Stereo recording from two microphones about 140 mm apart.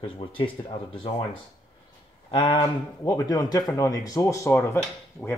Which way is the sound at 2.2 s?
35° left (ahead or behind).